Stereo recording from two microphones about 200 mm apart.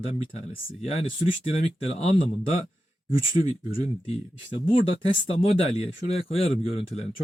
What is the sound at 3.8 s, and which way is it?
Speech, 30° left (ahead or behind).